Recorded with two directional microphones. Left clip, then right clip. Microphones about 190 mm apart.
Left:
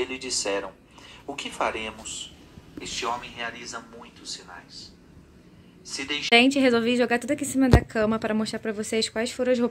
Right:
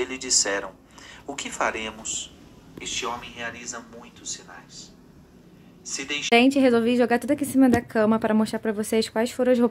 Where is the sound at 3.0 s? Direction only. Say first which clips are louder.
Left 1 dB; 35° left (ahead or behind).